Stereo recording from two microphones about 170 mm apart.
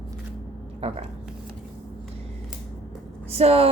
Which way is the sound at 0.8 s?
35° right (ahead or behind).